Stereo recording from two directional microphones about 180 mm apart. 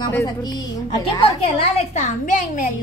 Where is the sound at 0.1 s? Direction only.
20° left (ahead or behind).